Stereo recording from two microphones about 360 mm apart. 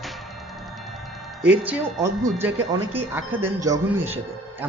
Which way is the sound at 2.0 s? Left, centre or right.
Centre.